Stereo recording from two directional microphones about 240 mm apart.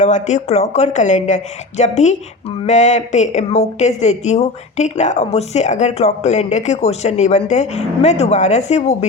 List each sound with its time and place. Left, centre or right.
0.0 s a woman's voice: left